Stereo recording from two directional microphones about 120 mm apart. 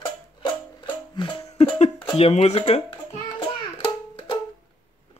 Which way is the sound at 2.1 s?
60° left (ahead or behind).